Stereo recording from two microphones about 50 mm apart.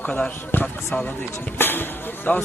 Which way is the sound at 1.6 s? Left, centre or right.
Left.